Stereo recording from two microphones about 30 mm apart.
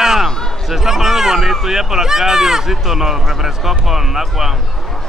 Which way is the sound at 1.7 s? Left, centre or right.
Centre.